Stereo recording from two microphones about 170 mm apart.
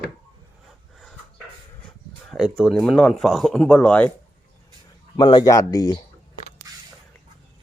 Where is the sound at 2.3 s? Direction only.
Centre (ahead or behind).